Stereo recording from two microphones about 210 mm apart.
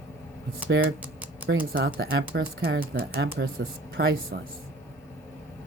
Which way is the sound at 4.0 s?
45° right (ahead or behind).